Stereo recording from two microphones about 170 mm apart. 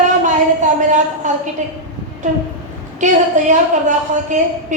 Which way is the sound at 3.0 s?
45° right (ahead or behind).